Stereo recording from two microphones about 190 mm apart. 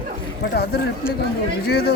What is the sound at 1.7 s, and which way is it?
Speech, 60° left (ahead or behind).